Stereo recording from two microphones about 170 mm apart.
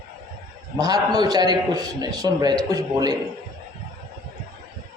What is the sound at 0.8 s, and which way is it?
A man's voice, 20° right (ahead or behind).